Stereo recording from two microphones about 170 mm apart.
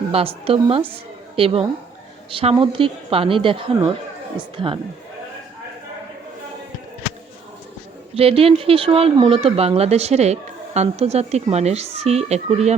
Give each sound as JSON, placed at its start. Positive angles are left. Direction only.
{"t": 0.1, "sound": "speech", "side_deg": -35}
{"t": 8.1, "sound": "speech", "side_deg": -35}